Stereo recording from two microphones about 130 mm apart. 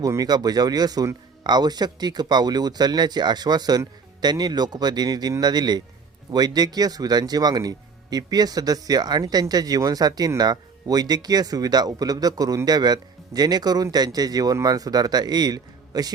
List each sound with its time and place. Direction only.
0.0 s speech: 25° right (ahead or behind)